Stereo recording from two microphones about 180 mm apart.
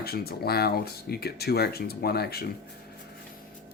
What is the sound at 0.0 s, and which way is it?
Speech, 60° left (ahead or behind).